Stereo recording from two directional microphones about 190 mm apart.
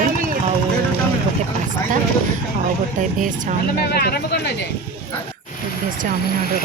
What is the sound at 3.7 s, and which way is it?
Speech, 55° left (ahead or behind).